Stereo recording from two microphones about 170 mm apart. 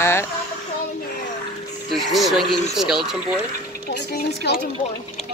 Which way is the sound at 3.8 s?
70° left (ahead or behind).